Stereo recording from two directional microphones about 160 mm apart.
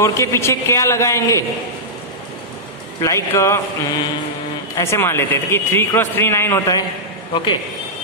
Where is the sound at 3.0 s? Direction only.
20° left (ahead or behind).